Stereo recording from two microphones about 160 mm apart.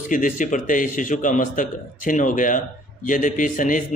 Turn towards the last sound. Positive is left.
turn(degrees=55)  # may be behind; listen again after turning